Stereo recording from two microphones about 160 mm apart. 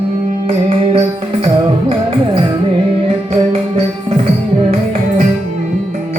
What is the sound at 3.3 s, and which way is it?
Music, 40° right (ahead or behind).